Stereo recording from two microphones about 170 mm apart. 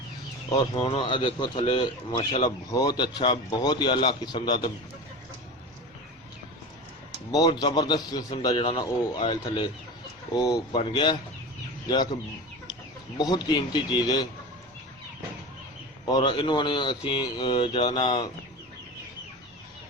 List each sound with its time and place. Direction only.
0.5 s a man's voice: 35° left (ahead or behind)
7.3 s a man's voice: 25° left (ahead or behind)
13.1 s a man's voice: 25° left (ahead or behind)
16.0 s a man's voice: 25° left (ahead or behind)